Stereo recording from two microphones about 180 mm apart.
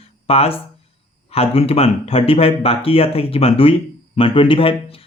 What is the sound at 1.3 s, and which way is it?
Speech, 35° left (ahead or behind).